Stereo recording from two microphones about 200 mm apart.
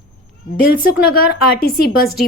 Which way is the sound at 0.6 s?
50° left (ahead or behind).